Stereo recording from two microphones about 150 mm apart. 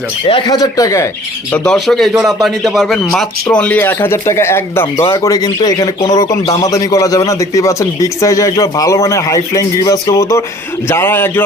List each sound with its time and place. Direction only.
0.3 s speech: 30° left (ahead or behind)
1.5 s a man's voice: 5° left (ahead or behind)